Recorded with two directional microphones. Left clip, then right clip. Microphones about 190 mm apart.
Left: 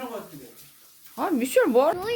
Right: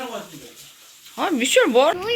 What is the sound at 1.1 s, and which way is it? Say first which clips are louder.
Speech: right 4 dB; centre (ahead or behind).